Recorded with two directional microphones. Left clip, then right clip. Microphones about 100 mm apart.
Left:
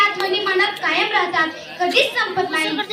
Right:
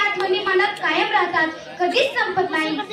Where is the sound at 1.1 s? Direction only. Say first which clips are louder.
Left 1 dB; 20° left (ahead or behind).